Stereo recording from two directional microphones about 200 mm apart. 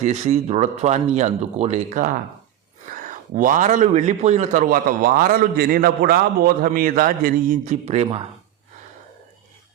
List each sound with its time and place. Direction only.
0.0 s a man's voice: 35° right (ahead or behind)